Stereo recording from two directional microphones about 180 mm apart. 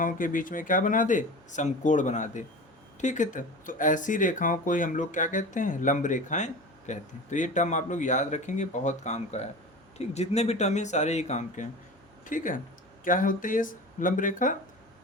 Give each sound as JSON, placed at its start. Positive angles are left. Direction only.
{"t": 0.0, "sound": "speech", "side_deg": 50}